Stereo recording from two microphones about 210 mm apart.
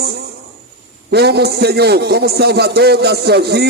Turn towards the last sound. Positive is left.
turn(degrees=-50)  # may be behind; listen again after turning